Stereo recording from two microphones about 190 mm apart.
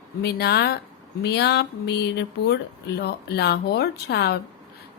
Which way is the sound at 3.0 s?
60° left (ahead or behind).